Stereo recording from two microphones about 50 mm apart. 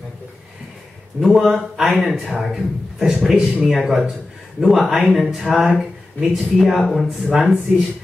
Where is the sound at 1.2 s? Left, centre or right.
Centre.